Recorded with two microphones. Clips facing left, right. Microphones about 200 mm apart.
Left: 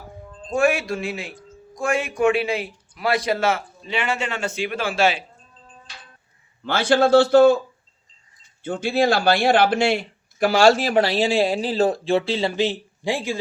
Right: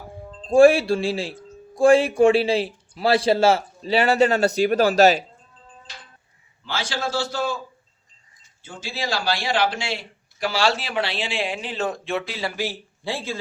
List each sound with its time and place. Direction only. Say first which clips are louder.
0.3 s speech: right 7 dB; 30° right (ahead or behind)
6.7 s a man's voice: left 11 dB; 55° left (ahead or behind)
8.6 s speech: left 11 dB; 60° left (ahead or behind); by 13.4 s 15° left (ahead or behind)